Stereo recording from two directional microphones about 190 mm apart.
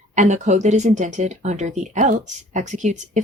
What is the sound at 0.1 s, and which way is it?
Speech, 40° right (ahead or behind).